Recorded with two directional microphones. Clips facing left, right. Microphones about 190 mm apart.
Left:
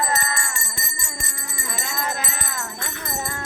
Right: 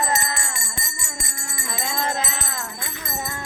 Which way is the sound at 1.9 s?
25° right (ahead or behind).